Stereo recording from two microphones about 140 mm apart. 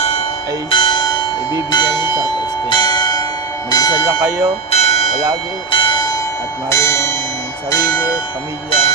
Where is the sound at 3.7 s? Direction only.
30° left (ahead or behind).